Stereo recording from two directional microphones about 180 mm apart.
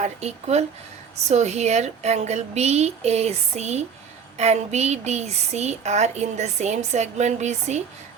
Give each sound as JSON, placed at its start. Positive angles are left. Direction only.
{"t": 0.0, "sound": "a woman's voice", "side_deg": -35}